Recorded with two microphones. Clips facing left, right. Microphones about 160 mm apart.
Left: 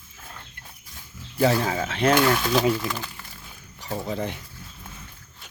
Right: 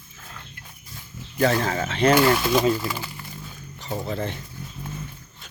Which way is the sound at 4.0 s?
15° left (ahead or behind).